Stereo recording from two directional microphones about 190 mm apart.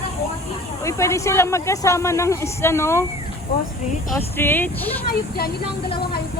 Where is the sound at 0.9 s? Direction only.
15° left (ahead or behind).